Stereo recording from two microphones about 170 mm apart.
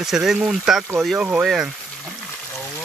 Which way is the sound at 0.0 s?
Centre (ahead or behind).